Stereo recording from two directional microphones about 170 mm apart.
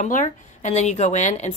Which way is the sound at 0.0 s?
45° left (ahead or behind).